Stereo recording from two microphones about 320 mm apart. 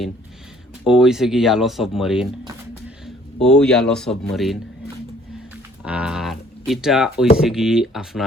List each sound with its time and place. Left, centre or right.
0.9 s speech: centre
3.4 s speech: centre
5.8 s a sound: centre
7.3 s speech: centre